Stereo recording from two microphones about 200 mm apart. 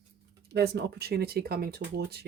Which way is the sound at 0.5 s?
55° right (ahead or behind).